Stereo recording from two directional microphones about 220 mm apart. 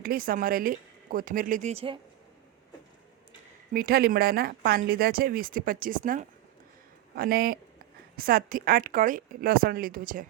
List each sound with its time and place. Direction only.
0.0 s speech: 40° right (ahead or behind)
3.7 s speech: 45° right (ahead or behind)